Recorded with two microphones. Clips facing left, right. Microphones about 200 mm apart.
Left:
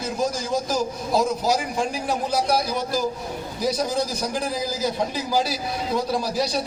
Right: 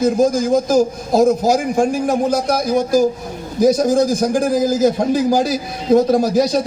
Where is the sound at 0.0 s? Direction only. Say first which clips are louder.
Right 11 dB; 45° right (ahead or behind).